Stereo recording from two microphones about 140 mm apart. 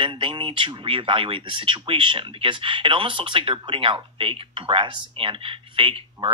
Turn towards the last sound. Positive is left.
turn(degrees=-40)  # may be behind; listen again after turning